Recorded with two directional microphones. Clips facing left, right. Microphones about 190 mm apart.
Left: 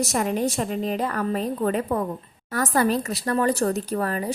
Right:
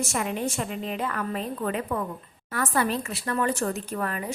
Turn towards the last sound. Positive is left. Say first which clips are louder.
# left 5 dB
turn(degrees=35)  # may be behind; listen again after turning